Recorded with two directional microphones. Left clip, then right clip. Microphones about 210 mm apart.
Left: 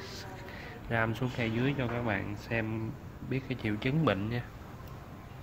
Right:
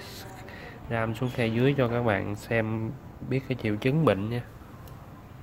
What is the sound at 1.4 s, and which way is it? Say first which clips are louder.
Speech: right 9 dB; 25° right (ahead or behind).